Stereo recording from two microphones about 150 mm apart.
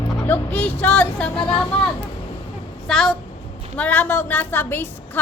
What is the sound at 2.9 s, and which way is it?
A woman's voice, 5° left (ahead or behind).